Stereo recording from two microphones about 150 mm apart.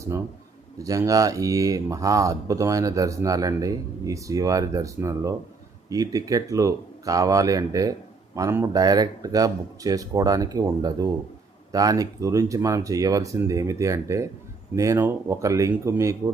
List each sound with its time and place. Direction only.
0.8 s speech: 20° right (ahead or behind)